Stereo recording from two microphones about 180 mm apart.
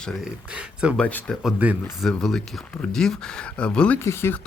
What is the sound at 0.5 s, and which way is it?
Speech, 5° right (ahead or behind).